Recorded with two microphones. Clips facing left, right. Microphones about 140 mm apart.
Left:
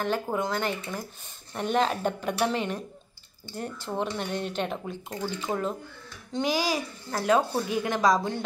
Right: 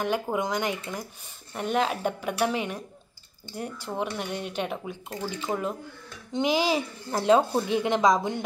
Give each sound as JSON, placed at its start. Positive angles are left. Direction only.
{"t": 0.0, "sound": "speech", "side_deg": -15}
{"t": 6.3, "sound": "a child's voice", "side_deg": -20}